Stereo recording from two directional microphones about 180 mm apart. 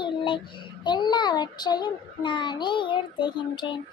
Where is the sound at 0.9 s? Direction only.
25° left (ahead or behind).